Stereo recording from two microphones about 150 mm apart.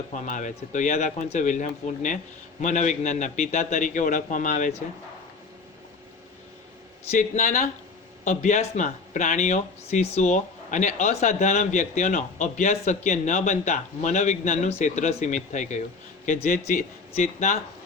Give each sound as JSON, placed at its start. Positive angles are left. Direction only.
{"t": 0.1, "sound": "a man's voice", "side_deg": 55}
{"t": 7.1, "sound": "a man's voice", "side_deg": 55}